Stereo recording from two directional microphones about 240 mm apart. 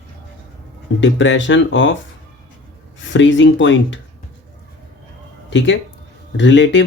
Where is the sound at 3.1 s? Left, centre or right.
Left.